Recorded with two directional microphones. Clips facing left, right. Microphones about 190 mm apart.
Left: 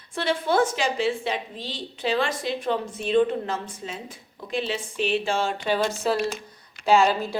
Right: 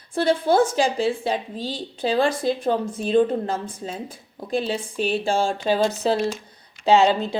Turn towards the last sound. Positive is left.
turn(degrees=-20)  # may be behind; listen again after turning